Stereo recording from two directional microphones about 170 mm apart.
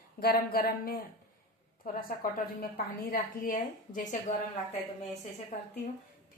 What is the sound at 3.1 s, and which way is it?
Speech, 55° left (ahead or behind).